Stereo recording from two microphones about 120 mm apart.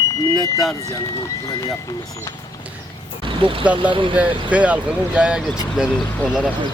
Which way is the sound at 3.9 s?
45° right (ahead or behind).